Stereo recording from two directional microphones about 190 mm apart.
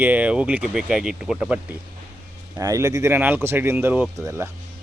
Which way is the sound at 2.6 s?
15° right (ahead or behind).